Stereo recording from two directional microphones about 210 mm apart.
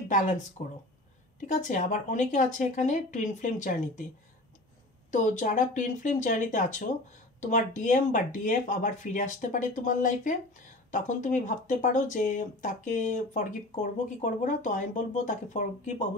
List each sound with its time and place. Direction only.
0.6 s speech: 35° left (ahead or behind)
5.1 s speech: 35° left (ahead or behind)